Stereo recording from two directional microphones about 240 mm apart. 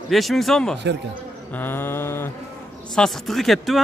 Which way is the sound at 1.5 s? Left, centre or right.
Centre.